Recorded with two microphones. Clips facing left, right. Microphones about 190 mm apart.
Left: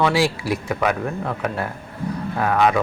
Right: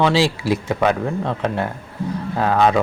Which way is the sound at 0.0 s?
25° right (ahead or behind).